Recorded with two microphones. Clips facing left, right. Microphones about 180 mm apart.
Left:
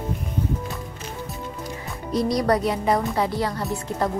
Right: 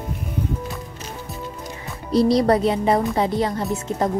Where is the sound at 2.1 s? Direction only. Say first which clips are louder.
Right 5 dB; 30° right (ahead or behind).